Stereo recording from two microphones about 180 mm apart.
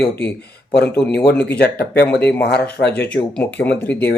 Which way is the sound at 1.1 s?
60° left (ahead or behind).